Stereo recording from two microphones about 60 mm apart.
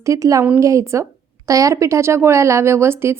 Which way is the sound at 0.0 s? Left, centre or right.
Right.